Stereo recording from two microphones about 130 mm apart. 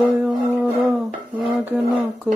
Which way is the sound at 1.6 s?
10° right (ahead or behind).